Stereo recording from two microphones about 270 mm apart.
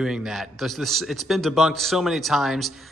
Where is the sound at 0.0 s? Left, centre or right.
Centre.